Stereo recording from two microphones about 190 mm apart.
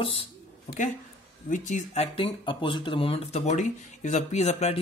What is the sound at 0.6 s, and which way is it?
Speech, 40° left (ahead or behind).